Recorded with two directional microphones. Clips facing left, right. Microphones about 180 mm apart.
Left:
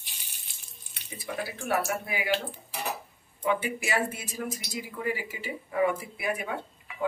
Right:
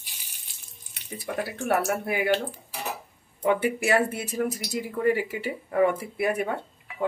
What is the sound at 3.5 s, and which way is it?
Speech, 60° right (ahead or behind).